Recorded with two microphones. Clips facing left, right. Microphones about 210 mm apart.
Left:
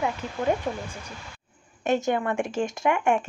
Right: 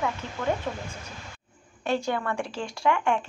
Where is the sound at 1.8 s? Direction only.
20° left (ahead or behind).